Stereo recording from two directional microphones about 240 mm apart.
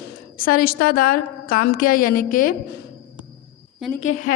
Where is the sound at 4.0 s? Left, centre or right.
Left.